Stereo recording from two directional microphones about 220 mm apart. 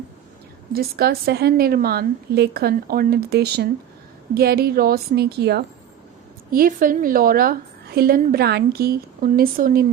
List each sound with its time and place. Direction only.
0.7 s a woman's voice: 45° right (ahead or behind)